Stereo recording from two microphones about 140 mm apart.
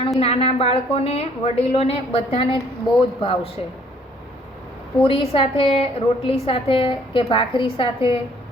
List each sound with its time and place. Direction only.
0.2 s a woman's voice: 45° left (ahead or behind)
5.0 s a woman's voice: 40° left (ahead or behind)